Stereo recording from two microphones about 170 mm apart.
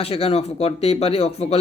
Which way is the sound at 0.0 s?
35° left (ahead or behind).